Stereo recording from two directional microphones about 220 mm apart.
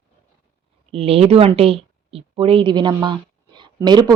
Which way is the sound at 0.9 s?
25° right (ahead or behind).